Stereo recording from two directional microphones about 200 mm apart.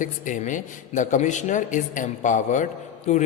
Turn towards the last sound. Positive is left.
turn(degrees=35)  # may be behind; listen again after turning